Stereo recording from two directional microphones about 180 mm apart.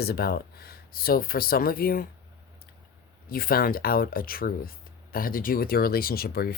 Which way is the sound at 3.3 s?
55° left (ahead or behind).